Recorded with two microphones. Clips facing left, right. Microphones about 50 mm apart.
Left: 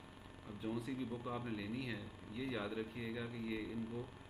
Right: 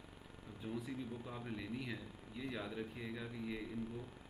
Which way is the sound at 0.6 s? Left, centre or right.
Centre.